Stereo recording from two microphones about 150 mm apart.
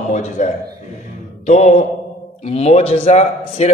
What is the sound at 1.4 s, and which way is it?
Mantra, 50° left (ahead or behind).